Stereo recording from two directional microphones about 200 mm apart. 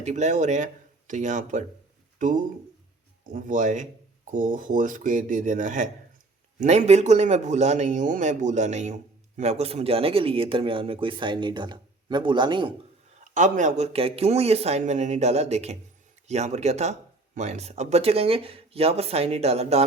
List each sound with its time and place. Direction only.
0.0 s speech: 35° right (ahead or behind)
13.3 s speech: 40° right (ahead or behind)